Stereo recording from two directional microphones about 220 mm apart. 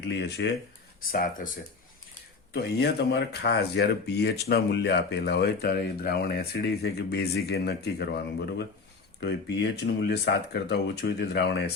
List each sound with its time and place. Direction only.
0.0 s speech: 50° left (ahead or behind)